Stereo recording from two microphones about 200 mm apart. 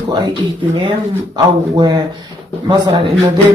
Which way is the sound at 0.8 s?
20° right (ahead or behind).